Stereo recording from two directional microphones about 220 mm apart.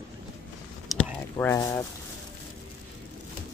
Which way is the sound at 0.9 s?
10° left (ahead or behind).